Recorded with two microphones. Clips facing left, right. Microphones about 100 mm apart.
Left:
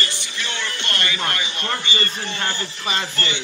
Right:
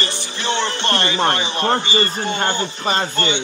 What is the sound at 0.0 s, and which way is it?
Speech, 25° right (ahead or behind).